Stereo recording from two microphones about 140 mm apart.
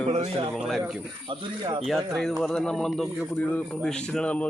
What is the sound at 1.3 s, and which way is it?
Speech, 35° right (ahead or behind).